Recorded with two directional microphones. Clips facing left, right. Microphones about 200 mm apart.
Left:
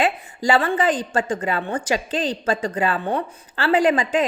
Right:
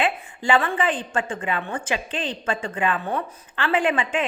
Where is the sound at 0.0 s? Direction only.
40° left (ahead or behind).